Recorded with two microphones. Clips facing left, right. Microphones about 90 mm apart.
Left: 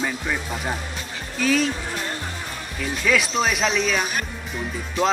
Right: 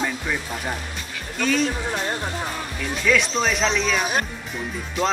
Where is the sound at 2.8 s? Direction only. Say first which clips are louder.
Even; 5° left (ahead or behind).